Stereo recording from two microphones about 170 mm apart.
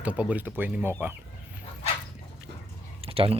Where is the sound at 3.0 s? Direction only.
35° right (ahead or behind).